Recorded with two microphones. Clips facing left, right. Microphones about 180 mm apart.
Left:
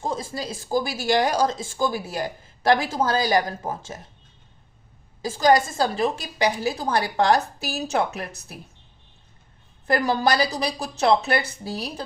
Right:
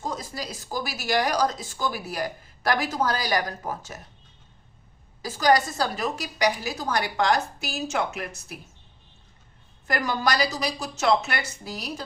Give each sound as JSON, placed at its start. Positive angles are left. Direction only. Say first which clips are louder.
{"t": 0.0, "sound": "speech", "louder": "left 4 dB", "side_deg": 25}
{"t": 5.2, "sound": "a woman's voice", "louder": "left 3 dB", "side_deg": 25}
{"t": 9.8, "sound": "a woman's voice", "louder": "left 5 dB", "side_deg": 30}